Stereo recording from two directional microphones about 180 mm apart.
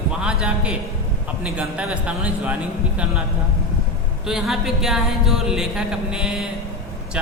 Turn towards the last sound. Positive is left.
turn(degrees=-5)  # may be behind; listen again after turning